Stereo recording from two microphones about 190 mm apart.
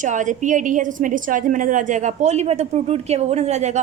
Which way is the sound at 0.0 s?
40° right (ahead or behind).